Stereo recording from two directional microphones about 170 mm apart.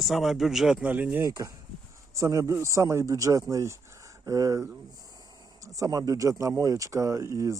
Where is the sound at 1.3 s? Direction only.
20° right (ahead or behind).